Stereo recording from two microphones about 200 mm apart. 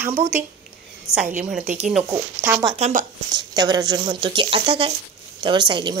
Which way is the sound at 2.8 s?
40° right (ahead or behind).